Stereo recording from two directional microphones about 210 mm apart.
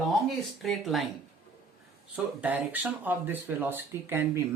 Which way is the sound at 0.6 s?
Centre (ahead or behind).